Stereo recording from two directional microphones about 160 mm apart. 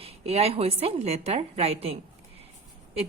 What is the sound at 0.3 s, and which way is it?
A woman's voice, 40° right (ahead or behind).